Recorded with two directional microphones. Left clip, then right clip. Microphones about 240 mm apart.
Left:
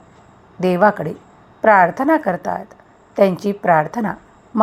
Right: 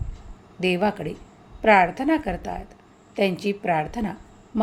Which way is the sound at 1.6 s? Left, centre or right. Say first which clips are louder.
Left 5 dB; centre.